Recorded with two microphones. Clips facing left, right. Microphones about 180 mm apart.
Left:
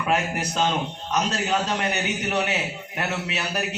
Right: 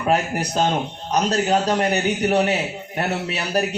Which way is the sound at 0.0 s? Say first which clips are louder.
Right 4 dB; 40° right (ahead or behind).